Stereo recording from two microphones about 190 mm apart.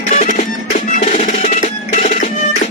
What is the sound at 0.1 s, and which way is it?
Music, 40° left (ahead or behind).